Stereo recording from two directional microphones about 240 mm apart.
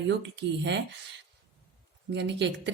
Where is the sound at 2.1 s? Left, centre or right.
Right.